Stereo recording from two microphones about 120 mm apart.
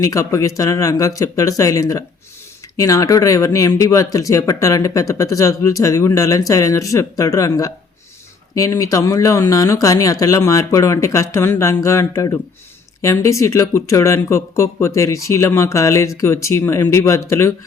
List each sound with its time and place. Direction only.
0.0 s speech: 30° left (ahead or behind)